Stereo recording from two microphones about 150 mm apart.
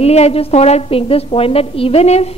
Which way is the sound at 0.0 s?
45° left (ahead or behind).